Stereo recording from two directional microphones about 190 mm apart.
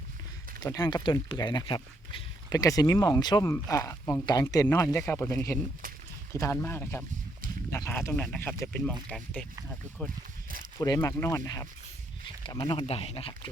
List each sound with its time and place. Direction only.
0.6 s speech: 20° left (ahead or behind); by 9.5 s 5° left (ahead or behind)
10.8 s speech: 15° left (ahead or behind)
12.8 s speech: 30° left (ahead or behind)